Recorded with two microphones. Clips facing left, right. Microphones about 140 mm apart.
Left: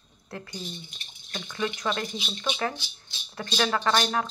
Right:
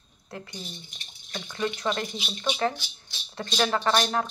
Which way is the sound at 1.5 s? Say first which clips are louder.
Right 1 dB; 35° right (ahead or behind).